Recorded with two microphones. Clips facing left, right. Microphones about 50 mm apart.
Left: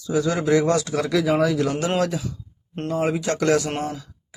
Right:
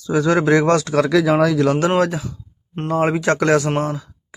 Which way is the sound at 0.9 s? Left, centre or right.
Right.